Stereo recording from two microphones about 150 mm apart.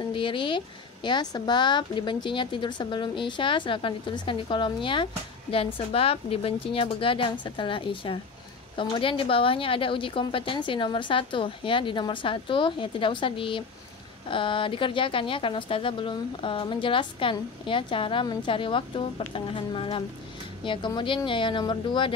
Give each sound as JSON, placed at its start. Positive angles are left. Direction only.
{"t": 0.1, "sound": "speech", "side_deg": 35}